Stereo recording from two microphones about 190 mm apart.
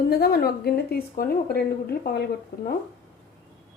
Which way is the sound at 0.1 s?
55° left (ahead or behind).